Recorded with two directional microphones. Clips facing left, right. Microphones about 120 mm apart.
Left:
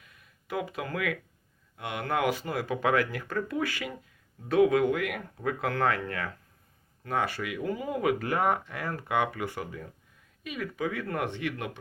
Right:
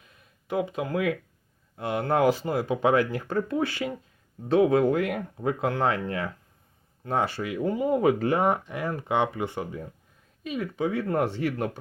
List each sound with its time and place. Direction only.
0.4 s speech: 25° right (ahead or behind)